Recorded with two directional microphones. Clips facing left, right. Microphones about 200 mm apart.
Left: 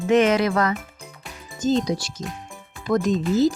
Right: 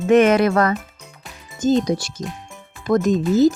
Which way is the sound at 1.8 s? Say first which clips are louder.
Right 4 dB; 55° right (ahead or behind).